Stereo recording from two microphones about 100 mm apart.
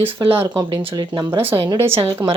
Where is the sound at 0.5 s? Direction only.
45° right (ahead or behind).